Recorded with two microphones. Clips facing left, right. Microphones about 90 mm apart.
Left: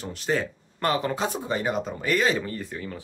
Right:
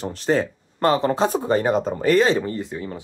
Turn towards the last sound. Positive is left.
turn(degrees=-25)  # may be behind; listen again after turning